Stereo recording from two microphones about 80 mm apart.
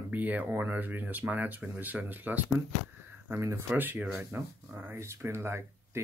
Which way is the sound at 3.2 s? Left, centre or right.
Right.